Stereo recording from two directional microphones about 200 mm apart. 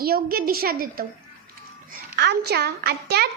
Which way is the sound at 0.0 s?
50° right (ahead or behind).